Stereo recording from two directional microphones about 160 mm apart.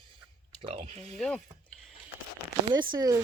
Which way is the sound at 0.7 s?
40° right (ahead or behind).